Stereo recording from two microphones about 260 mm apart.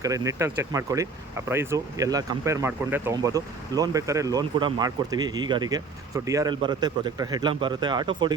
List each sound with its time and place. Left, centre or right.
0.0 s speech: centre